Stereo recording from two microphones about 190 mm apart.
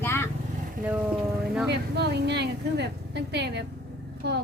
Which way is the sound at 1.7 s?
60° right (ahead or behind).